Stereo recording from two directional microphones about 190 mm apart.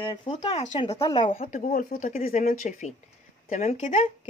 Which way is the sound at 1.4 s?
45° left (ahead or behind).